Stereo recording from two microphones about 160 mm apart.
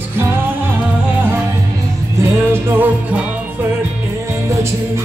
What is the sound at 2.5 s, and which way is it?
Music, 10° right (ahead or behind).